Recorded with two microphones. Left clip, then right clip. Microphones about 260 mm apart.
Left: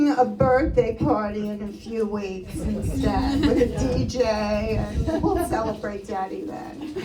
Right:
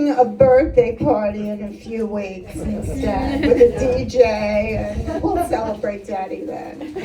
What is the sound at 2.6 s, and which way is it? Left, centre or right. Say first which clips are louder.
A woman's voice: right 4 dB; right.